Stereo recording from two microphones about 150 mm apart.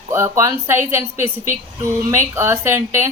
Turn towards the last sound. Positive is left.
turn(degrees=-15)  # may be behind; listen again after turning